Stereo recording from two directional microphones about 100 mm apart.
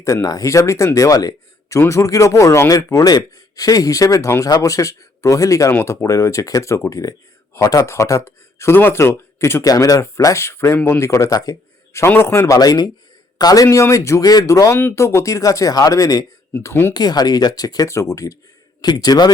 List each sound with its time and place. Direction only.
0.0 s speech: 30° left (ahead or behind)
11.9 s speech: 25° left (ahead or behind)
12.5 s speech: 40° left (ahead or behind)
16.5 s speech: 25° left (ahead or behind)
16.9 s speech: 45° left (ahead or behind)